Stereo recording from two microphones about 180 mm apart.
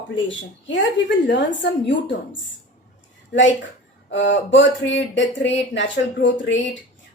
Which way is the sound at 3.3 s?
90° left.